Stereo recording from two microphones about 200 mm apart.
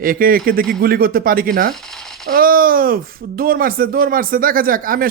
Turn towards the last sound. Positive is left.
turn(degrees=-45)  # may be behind; listen again after turning